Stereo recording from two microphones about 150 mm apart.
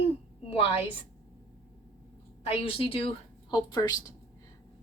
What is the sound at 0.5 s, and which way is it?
Speech, 40° left (ahead or behind).